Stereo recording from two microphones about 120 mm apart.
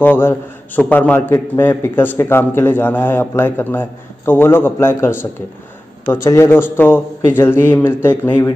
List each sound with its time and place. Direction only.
0.0 s a man's voice: 15° left (ahead or behind)